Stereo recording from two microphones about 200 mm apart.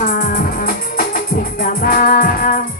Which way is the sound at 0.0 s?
40° left (ahead or behind).